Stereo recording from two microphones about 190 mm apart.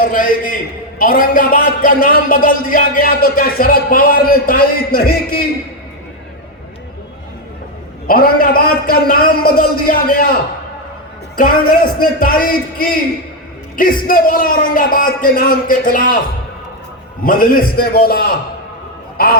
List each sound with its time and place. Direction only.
0.0 s a man's voice: 50° left (ahead or behind)
8.0 s a man's voice: 50° left (ahead or behind)
11.3 s a man's voice: 50° left (ahead or behind)
17.2 s a man's voice: 50° left (ahead or behind)